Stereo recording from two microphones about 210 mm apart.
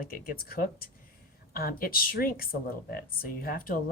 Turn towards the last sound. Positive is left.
turn(degrees=45)  # may be behind; listen again after turning